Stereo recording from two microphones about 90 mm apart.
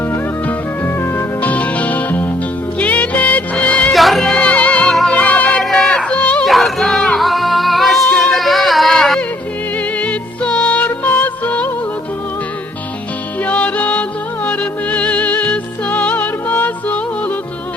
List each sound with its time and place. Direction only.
0.4 s music: 25° left (ahead or behind)
3.9 s music: centre (ahead or behind)
5.6 s a sound: 5° left (ahead or behind)
6.5 s music: centre (ahead or behind)
9.7 s music: 15° left (ahead or behind)
13.4 s music: 15° left (ahead or behind)